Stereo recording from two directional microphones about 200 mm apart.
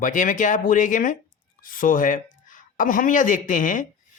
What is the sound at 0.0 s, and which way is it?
Speech, 40° left (ahead or behind).